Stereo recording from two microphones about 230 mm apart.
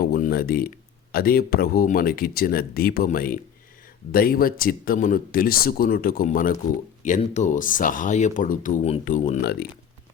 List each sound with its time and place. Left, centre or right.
0.0 s speech: left